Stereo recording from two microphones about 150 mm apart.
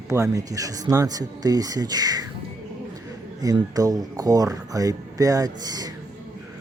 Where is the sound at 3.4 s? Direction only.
25° right (ahead or behind).